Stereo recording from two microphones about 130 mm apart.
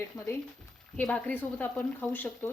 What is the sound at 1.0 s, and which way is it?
Speech, 10° left (ahead or behind).